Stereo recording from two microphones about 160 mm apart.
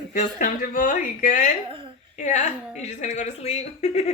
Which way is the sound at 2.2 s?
50° left (ahead or behind).